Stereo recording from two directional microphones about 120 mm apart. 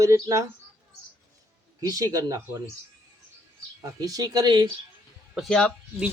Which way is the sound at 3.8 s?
30° right (ahead or behind).